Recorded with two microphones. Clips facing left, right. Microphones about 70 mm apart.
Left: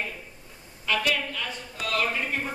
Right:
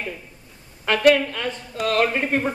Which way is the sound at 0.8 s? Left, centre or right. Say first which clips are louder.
Right 10 dB; right.